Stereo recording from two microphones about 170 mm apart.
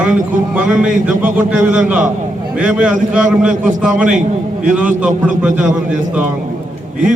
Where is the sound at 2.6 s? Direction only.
5° right (ahead or behind).